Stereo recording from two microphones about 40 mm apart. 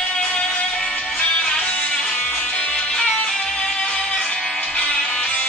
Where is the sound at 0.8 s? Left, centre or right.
Left.